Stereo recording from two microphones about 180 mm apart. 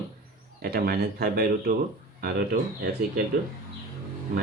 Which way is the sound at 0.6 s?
55° right (ahead or behind).